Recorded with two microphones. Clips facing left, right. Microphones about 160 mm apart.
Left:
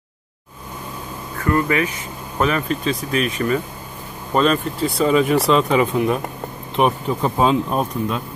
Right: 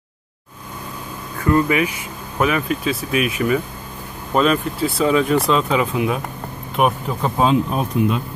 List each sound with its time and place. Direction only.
1.4 s speech: 15° right (ahead or behind)